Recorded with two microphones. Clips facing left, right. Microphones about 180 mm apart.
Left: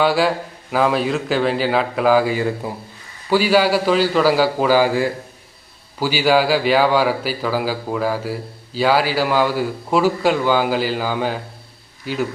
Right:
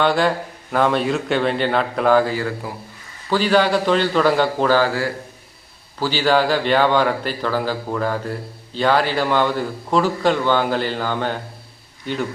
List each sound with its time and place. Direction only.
0.0 s speech: 5° left (ahead or behind)
2.3 s speech: 20° left (ahead or behind)
3.2 s a man's voice: 10° left (ahead or behind)